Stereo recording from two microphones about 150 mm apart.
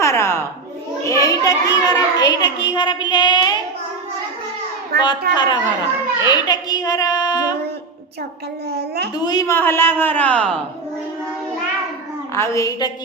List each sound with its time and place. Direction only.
0.0 s a sound: 20° left (ahead or behind)
1.0 s a child's voice: 20° left (ahead or behind)
4.9 s a child's voice: 90° right
5.3 s a child's voice: 30° left (ahead or behind)
8.7 s a child's voice: 90° right
9.1 s a child's voice: 25° left (ahead or behind)
9.5 s a woman's voice: 15° left (ahead or behind)
12.3 s a child's voice: 20° left (ahead or behind)